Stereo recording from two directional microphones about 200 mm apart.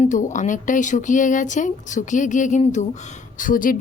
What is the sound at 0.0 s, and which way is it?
Speech, 40° left (ahead or behind).